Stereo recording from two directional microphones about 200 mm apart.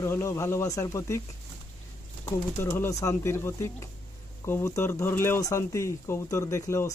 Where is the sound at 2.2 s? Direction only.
15° left (ahead or behind).